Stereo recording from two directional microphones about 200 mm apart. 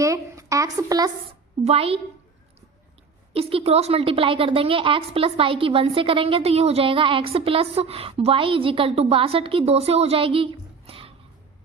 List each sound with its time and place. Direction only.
0.0 s a sound: 15° right (ahead or behind)
1.6 s a woman's voice: 30° right (ahead or behind)
3.3 s a woman's voice: 30° right (ahead or behind)